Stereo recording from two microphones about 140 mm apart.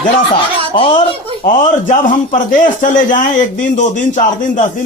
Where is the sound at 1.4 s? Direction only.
65° left (ahead or behind).